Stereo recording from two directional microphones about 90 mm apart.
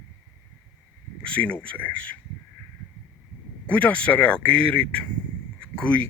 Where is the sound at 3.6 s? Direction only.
15° left (ahead or behind).